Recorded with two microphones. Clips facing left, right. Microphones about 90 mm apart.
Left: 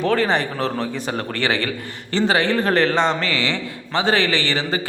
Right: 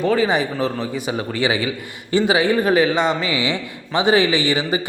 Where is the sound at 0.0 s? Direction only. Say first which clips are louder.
Right 1 dB; 5° right (ahead or behind).